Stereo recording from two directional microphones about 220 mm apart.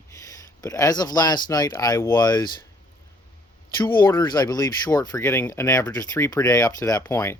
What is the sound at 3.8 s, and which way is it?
A man's voice, 20° left (ahead or behind).